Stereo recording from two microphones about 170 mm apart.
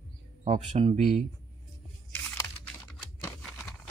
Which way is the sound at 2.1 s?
10° left (ahead or behind).